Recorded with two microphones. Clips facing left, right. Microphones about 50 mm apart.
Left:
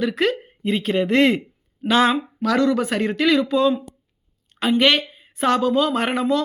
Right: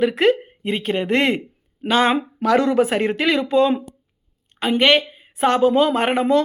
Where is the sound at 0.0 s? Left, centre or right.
Centre.